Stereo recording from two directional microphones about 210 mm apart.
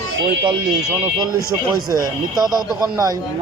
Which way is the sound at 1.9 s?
20° right (ahead or behind).